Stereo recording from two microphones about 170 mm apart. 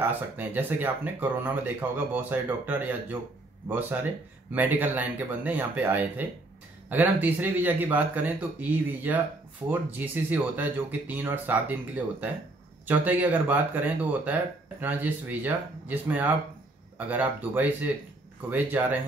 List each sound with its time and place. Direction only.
0.0 s speech: 10° right (ahead or behind)